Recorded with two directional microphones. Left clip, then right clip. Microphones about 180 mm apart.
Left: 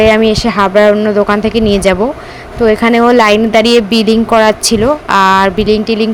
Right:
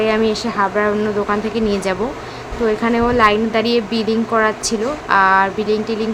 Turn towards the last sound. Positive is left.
turn(degrees=45)  # may be behind; listen again after turning